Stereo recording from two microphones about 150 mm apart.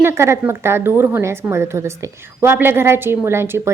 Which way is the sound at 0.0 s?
15° right (ahead or behind).